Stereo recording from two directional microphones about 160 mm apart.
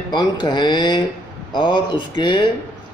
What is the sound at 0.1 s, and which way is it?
Speech, 25° left (ahead or behind).